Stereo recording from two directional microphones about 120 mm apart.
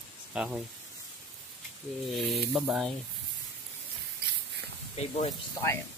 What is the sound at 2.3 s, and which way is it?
Speech, centre (ahead or behind).